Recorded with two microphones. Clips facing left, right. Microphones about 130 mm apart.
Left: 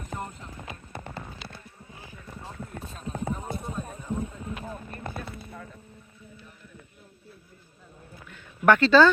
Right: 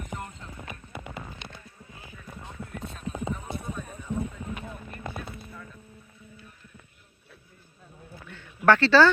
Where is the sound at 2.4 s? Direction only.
30° left (ahead or behind).